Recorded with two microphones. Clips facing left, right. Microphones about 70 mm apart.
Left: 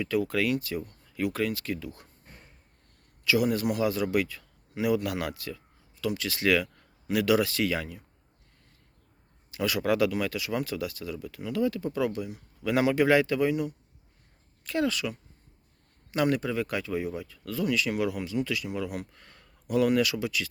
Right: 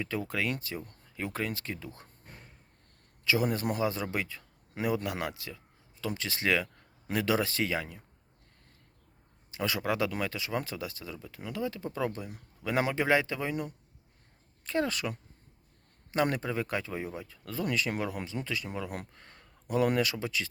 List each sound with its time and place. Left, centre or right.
0.0 s speech: right
3.2 s speech: right
9.5 s speech: right
12.7 s speech: right